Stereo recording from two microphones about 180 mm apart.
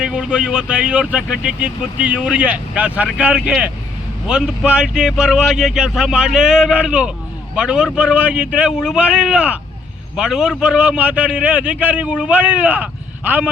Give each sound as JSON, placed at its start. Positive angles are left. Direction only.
{"t": 0.0, "sound": "a man's voice", "side_deg": -5}